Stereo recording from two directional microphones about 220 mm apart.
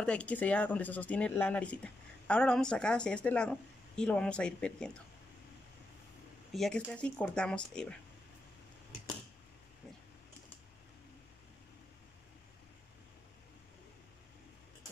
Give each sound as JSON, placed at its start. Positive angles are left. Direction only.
{"t": 0.0, "sound": "speech", "side_deg": 5}
{"t": 6.5, "sound": "speech", "side_deg": 5}